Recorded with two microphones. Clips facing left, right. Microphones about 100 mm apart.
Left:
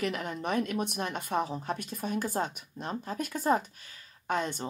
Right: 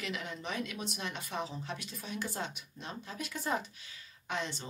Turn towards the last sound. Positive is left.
turn(degrees=50)  # may be behind; listen again after turning